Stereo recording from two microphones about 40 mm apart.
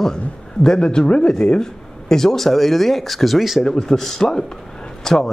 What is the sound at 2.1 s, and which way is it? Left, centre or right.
Speech, centre.